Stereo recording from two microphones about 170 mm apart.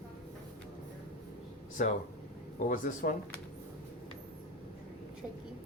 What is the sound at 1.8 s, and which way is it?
Speech, 45° left (ahead or behind).